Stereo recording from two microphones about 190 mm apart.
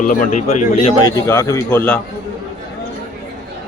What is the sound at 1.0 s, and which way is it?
Speech, 20° left (ahead or behind).